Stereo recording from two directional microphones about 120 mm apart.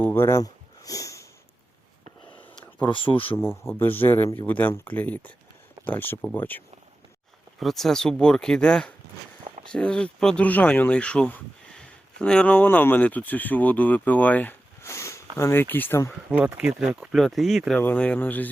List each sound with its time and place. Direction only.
0.0 s a sound: 20° left (ahead or behind)
2.8 s speech: 45° left (ahead or behind)
3.3 s a man's voice: 20° left (ahead or behind)
7.6 s speech: centre (ahead or behind); by 16.1 s 20° left (ahead or behind)
16.6 s speech: 5° right (ahead or behind)
17.7 s speech: 15° left (ahead or behind)